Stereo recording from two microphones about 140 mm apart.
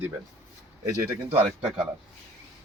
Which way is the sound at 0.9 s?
20° right (ahead or behind).